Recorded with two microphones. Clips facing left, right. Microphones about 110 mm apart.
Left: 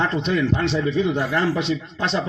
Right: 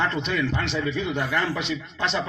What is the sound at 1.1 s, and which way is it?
Speech, 35° left (ahead or behind).